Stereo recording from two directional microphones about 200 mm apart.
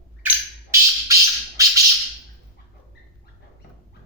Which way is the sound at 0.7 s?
15° right (ahead or behind).